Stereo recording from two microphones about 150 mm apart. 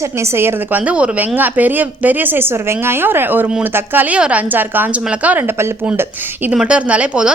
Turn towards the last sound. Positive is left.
turn(degrees=-5)  # may be behind; listen again after turning